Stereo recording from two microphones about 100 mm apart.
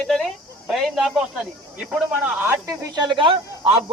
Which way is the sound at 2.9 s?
50° right (ahead or behind).